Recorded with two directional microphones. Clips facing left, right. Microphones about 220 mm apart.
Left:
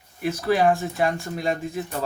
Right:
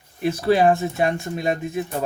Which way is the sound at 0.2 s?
30° right (ahead or behind).